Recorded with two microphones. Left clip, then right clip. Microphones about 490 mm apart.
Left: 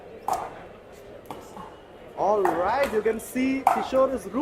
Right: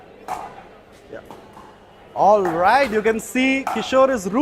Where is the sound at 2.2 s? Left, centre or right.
Right.